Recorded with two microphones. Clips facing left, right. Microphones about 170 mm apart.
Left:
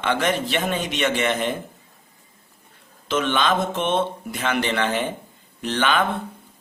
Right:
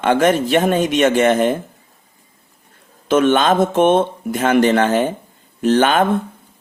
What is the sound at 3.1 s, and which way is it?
Speech, 50° right (ahead or behind).